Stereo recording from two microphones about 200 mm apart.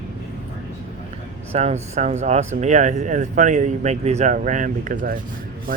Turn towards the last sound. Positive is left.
turn(degrees=-40)  # may be behind; listen again after turning